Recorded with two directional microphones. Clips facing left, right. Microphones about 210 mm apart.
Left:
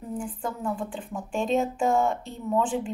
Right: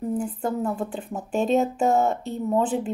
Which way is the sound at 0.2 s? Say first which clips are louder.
Right 6 dB; 40° right (ahead or behind).